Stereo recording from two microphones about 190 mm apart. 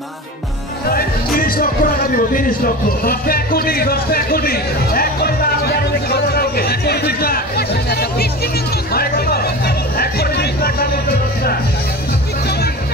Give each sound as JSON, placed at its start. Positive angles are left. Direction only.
{"t": 0.8, "sound": "music", "side_deg": 50}